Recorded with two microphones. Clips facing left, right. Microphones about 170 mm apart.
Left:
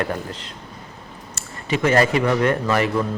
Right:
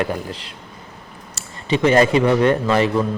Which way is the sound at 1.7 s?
20° right (ahead or behind).